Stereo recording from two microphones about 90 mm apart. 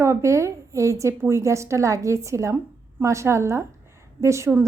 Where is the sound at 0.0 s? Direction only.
30° right (ahead or behind).